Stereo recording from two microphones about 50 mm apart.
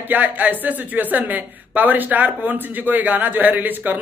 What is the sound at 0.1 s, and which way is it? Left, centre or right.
A woman's voice, right.